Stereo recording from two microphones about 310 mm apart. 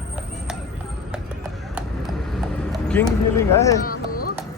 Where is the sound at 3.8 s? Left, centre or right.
Left.